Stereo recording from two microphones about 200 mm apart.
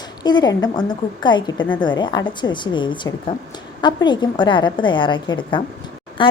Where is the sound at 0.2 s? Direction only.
20° left (ahead or behind).